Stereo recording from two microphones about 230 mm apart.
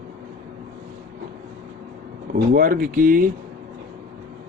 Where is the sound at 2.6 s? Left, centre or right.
Right.